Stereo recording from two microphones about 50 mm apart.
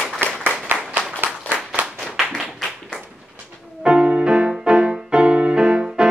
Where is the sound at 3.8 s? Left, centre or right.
Centre.